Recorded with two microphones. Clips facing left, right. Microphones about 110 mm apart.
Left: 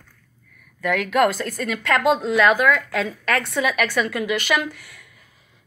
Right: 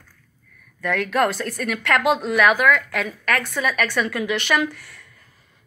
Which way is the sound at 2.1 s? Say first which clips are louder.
Left 1 dB; 20° left (ahead or behind).